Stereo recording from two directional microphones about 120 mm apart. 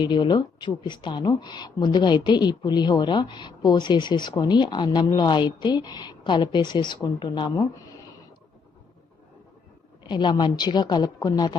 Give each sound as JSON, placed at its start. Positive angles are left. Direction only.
{"t": 0.0, "sound": "speech", "side_deg": 40}
{"t": 7.5, "sound": "a sound", "side_deg": 25}
{"t": 10.0, "sound": "speech", "side_deg": 40}